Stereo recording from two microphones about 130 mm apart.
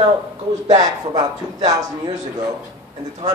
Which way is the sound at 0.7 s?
30° right (ahead or behind).